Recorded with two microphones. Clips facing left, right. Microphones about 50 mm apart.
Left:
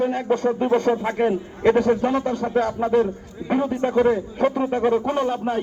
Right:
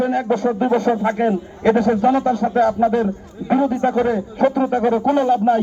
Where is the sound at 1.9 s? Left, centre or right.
Centre.